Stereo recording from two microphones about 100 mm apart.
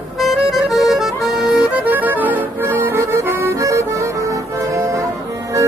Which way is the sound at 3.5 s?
30° right (ahead or behind).